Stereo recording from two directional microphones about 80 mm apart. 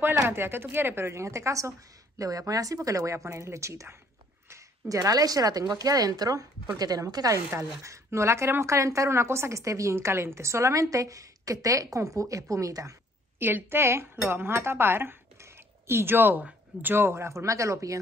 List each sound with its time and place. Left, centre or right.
0.3 s a woman's voice: right
13.4 s a woman's voice: right